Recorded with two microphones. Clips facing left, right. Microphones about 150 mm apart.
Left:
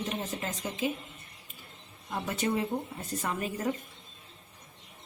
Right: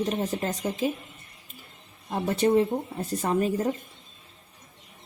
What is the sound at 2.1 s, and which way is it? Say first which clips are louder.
Speech: right 8 dB; 30° right (ahead or behind).